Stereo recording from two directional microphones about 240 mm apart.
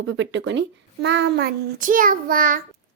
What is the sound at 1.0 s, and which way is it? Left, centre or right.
Child singing, right.